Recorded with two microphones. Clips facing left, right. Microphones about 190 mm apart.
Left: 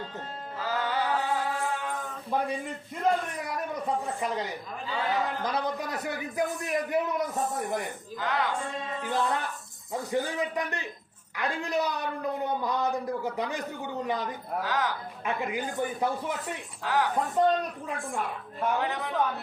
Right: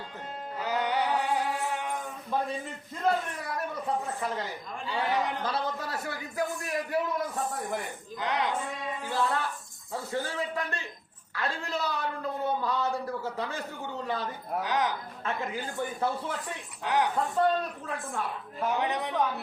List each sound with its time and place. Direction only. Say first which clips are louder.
0.6 s music: right 1 dB; 20° right (ahead or behind)
3.1 s a man's voice: left 1 dB; 15° left (ahead or behind)
4.9 s speech: even; 20° right (ahead or behind)
5.4 s a man's voice: left 2 dB; 15° left (ahead or behind)
8.2 s speech: even; 20° right (ahead or behind)
9.0 s a man's voice: even; 20° left (ahead or behind)
14.6 s speech: right 1 dB; 20° right (ahead or behind)
15.2 s a man's voice: left 3 dB; 15° left (ahead or behind)
16.8 s speech: even; 20° right (ahead or behind)
17.3 s a man's voice: left 3 dB; 15° left (ahead or behind)
18.8 s speech: right 1 dB; 20° right (ahead or behind)